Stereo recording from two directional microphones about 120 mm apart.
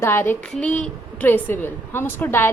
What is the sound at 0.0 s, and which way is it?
A woman's voice, 20° left (ahead or behind).